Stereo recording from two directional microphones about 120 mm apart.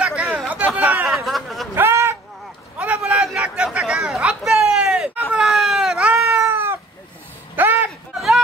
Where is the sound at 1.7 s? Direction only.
20° right (ahead or behind).